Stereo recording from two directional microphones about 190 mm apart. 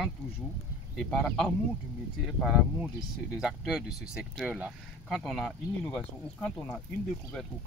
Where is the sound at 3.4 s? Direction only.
5° right (ahead or behind).